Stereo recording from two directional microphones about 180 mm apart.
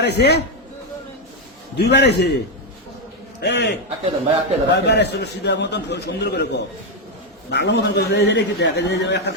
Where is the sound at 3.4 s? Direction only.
70° left (ahead or behind).